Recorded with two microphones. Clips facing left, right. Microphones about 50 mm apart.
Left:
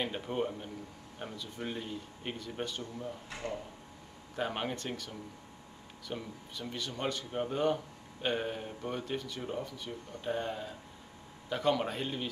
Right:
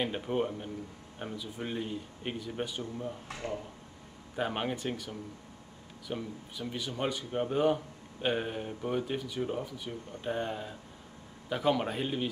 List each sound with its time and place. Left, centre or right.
0.0 s a man's voice: centre
4.4 s a man's voice: centre